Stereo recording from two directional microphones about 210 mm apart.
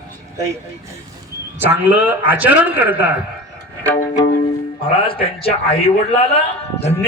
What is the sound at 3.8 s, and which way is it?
Music, 10° left (ahead or behind).